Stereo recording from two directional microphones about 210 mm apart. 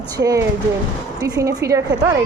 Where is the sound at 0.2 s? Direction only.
15° right (ahead or behind).